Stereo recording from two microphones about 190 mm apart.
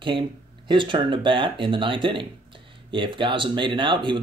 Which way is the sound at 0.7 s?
25° right (ahead or behind).